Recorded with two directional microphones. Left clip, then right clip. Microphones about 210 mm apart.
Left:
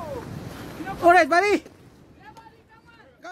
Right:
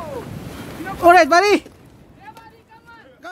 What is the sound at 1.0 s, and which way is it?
Speech, 15° right (ahead or behind).